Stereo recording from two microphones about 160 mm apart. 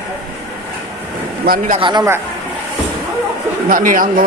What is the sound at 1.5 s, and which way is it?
Speech, 70° right (ahead or behind).